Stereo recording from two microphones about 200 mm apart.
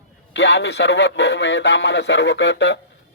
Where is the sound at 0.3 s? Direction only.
60° left (ahead or behind).